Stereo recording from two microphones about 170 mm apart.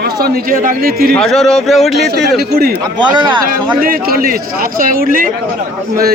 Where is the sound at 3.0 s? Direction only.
30° right (ahead or behind).